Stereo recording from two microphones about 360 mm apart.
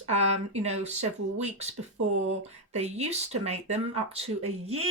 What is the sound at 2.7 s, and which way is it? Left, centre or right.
Speech, centre.